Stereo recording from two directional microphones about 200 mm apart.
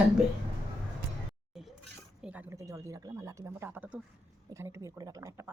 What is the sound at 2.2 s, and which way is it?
A woman's voice, 5° right (ahead or behind).